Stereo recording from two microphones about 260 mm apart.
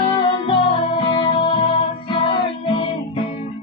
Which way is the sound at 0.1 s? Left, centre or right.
Centre.